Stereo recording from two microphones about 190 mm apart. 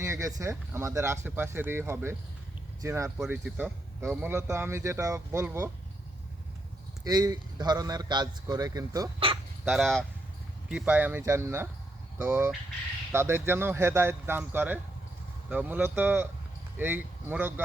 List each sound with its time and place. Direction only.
0.0 s a man's voice: 15° right (ahead or behind)
7.0 s a man's voice: 20° right (ahead or behind)
9.6 s a man's voice: centre (ahead or behind)